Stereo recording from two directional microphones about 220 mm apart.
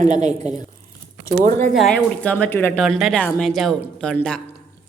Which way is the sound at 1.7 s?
Centre (ahead or behind).